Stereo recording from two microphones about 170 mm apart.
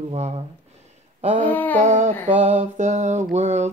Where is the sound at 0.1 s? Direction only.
40° right (ahead or behind).